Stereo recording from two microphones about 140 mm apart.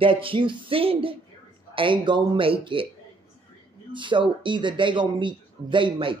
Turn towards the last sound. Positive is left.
turn(degrees=-35)  # may be behind; listen again after turning